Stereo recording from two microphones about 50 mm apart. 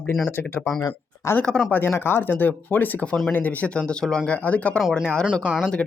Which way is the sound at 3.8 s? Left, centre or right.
Centre.